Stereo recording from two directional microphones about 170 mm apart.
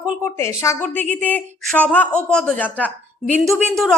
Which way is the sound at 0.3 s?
15° left (ahead or behind).